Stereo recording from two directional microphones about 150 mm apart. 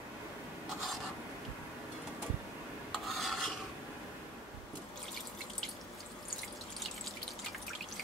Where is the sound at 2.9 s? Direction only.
Centre (ahead or behind).